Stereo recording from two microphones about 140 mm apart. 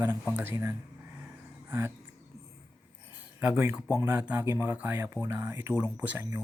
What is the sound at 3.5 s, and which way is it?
Speech, 10° right (ahead or behind).